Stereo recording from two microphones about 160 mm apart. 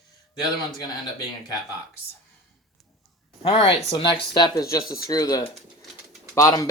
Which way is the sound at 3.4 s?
35° left (ahead or behind).